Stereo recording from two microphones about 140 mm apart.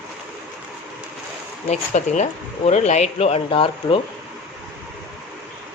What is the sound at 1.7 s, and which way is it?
Speech, 55° left (ahead or behind).